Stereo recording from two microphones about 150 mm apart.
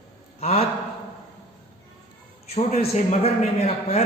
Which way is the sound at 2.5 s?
45° left (ahead or behind).